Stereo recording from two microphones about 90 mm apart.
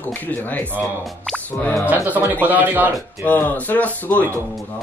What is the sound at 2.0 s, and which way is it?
Speech, 20° right (ahead or behind).